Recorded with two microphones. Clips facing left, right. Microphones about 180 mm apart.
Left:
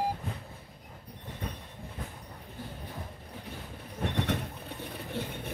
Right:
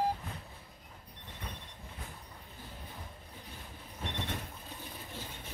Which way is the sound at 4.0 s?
65° left (ahead or behind).